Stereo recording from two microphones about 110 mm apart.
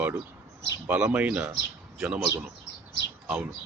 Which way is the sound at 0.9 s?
10° right (ahead or behind).